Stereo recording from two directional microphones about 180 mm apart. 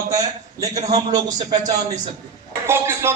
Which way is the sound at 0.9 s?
20° right (ahead or behind).